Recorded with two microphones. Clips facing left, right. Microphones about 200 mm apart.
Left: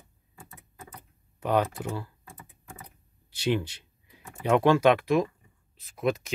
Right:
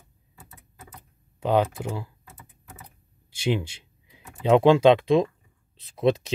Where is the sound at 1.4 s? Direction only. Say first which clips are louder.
Right 3 dB; 20° right (ahead or behind).